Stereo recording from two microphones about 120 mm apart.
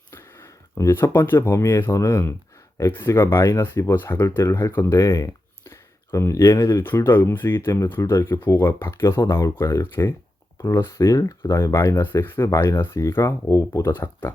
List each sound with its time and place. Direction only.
0.1 s speech: 25° left (ahead or behind)